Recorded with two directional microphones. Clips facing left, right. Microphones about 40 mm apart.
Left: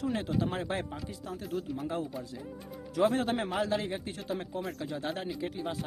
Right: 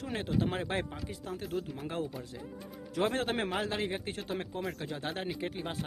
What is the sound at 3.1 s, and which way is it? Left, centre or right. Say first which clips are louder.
Speech: left 2 dB; right.